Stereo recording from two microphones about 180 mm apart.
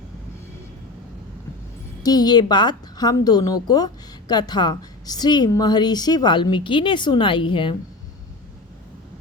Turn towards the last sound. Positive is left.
turn(degrees=30)  # may be behind; listen again after turning